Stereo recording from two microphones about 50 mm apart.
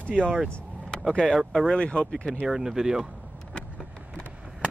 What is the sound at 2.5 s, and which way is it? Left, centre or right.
Speech, centre.